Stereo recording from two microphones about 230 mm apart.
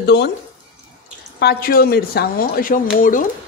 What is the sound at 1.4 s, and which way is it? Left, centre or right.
Speech, left.